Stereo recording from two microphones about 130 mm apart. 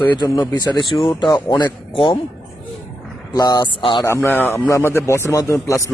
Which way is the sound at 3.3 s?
30° left (ahead or behind).